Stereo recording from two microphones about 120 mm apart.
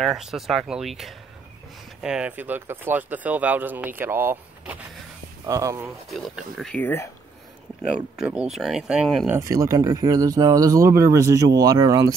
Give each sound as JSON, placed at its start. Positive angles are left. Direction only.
{"t": 0.0, "sound": "speech", "side_deg": -5}
{"t": 6.0, "sound": "speech", "side_deg": 0}
{"t": 6.7, "sound": "speech", "side_deg": 15}
{"t": 8.5, "sound": "speech", "side_deg": 0}
{"t": 9.4, "sound": "speech", "side_deg": -30}